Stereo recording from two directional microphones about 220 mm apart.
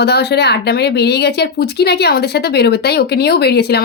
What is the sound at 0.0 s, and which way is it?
Speech, 50° left (ahead or behind).